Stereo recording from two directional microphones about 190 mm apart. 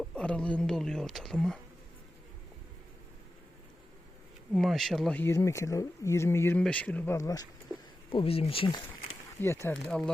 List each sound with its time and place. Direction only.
0.0 s speech: 5° left (ahead or behind)
4.5 s speech: centre (ahead or behind); by 7.4 s 15° left (ahead or behind)
8.1 s speech: 30° left (ahead or behind)
9.4 s speech: 15° left (ahead or behind)